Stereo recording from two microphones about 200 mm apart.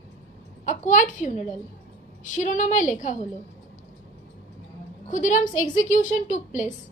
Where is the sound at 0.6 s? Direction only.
40° left (ahead or behind).